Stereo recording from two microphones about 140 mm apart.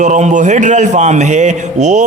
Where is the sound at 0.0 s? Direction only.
60° right (ahead or behind).